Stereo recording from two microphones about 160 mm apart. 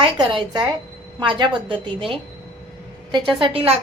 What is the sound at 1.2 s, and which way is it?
A woman's voice, 30° right (ahead or behind).